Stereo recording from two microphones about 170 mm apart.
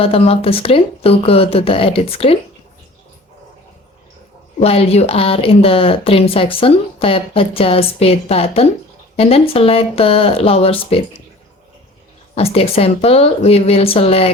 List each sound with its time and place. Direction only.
0.0 s speech: 35° left (ahead or behind)
4.6 s speech: 35° left (ahead or behind)
12.3 s speech: 35° left (ahead or behind)